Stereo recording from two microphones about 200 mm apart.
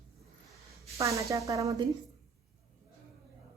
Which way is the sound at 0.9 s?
15° right (ahead or behind).